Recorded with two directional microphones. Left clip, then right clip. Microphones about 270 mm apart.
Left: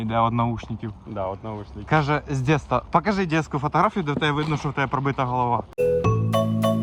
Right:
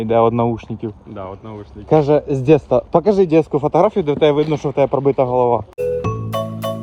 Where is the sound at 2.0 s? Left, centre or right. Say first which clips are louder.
Right 10 dB; left.